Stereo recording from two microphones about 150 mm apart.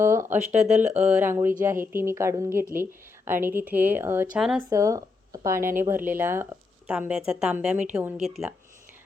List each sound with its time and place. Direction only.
0.0 s a sound: 20° right (ahead or behind)
0.5 s speech: 50° right (ahead or behind)
0.9 s speech: 10° right (ahead or behind)
4.4 s speech: 5° right (ahead or behind)
4.7 s speech: 20° right (ahead or behind); by 8.5 s centre (ahead or behind)